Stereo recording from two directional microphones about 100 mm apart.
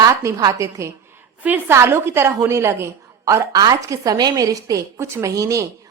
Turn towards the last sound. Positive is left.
turn(degrees=-30)  # may be behind; listen again after turning